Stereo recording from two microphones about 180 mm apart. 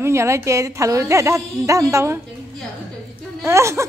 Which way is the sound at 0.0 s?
15° right (ahead or behind).